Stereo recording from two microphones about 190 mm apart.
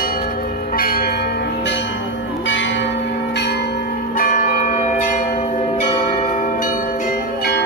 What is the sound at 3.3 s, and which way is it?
Church bell, 60° left (ahead or behind).